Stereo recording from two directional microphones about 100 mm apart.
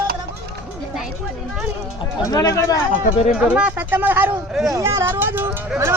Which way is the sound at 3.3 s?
10° right (ahead or behind).